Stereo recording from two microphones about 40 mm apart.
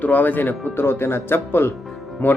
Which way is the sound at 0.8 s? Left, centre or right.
Left.